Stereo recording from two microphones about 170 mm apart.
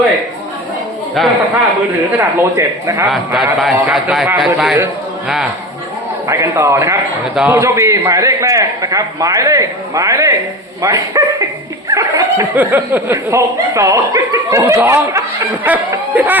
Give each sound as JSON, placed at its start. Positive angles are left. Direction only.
{"t": 1.2, "sound": "speech", "side_deg": 0}
{"t": 2.1, "sound": "speech", "side_deg": -15}
{"t": 3.1, "sound": "speech", "side_deg": 0}
{"t": 6.2, "sound": "a man's voice", "side_deg": -15}